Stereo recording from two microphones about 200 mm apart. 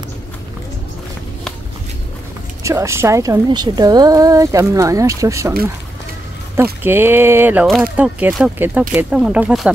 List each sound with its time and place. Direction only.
2.6 s speech: 15° right (ahead or behind)
6.5 s speech: 10° right (ahead or behind)